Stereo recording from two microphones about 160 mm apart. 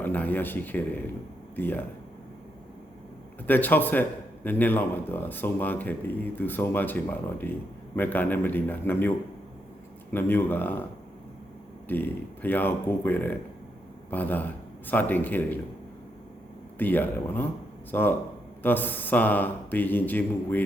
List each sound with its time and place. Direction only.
0.0 s speech: 10° left (ahead or behind)
3.4 s speech: 10° left (ahead or behind)
11.9 s speech: 10° left (ahead or behind)
16.7 s speech: 10° left (ahead or behind)